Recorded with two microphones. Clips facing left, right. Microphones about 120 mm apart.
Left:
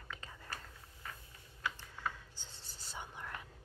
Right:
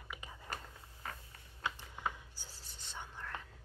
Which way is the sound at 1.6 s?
15° right (ahead or behind).